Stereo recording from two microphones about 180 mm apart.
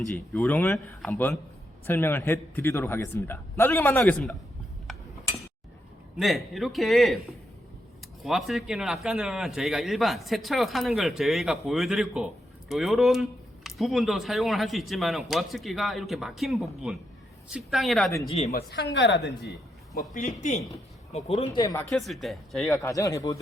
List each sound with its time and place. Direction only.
0.1 s a man's voice: 10° left (ahead or behind)
6.1 s a man's voice: centre (ahead or behind)
8.2 s a man's voice: centre (ahead or behind)
18.3 s speech: 35° left (ahead or behind)
18.5 s a woman's voice: 70° left (ahead or behind)
20.1 s a man's voice: 45° left (ahead or behind)
21.6 s a man's voice: 15° left (ahead or behind)
21.9 s a man's voice: centre (ahead or behind)
22.7 s a man's voice: 15° left (ahead or behind)